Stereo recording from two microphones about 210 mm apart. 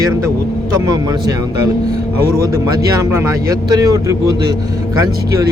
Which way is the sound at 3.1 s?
15° right (ahead or behind).